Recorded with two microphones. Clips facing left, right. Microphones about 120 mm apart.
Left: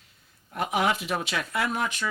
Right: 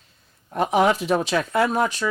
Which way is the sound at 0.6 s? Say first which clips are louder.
Right 7 dB; 35° right (ahead or behind).